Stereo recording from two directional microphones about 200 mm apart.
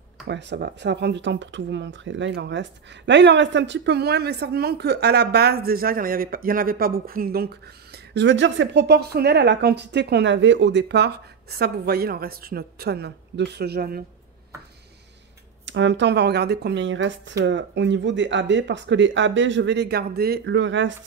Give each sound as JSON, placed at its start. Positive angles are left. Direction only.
{"t": 0.3, "sound": "speech", "side_deg": -60}
{"t": 15.6, "sound": "speech", "side_deg": -65}